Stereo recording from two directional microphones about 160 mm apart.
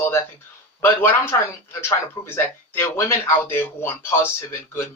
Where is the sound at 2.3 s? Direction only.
15° left (ahead or behind).